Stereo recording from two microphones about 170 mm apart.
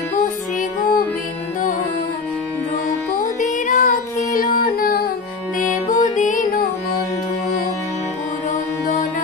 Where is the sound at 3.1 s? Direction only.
45° left (ahead or behind).